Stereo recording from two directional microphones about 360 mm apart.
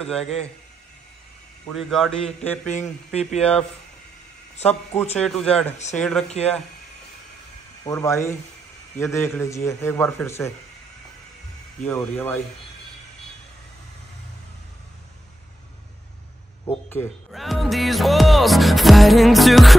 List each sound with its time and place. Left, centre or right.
1.7 s a man's voice: centre
2.7 s speech: centre
3.3 s a man's voice: centre
5.2 s a man's voice: centre
6.2 s a man's voice: centre
7.8 s a man's voice: centre
11.8 s a man's voice: centre
16.6 s music: centre